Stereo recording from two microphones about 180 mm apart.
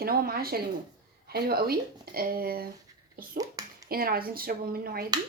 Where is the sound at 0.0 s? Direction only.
55° right (ahead or behind).